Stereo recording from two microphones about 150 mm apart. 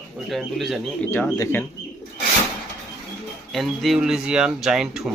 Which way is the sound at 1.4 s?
15° left (ahead or behind).